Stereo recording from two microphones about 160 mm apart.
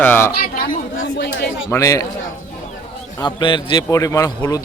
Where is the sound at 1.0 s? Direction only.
85° left.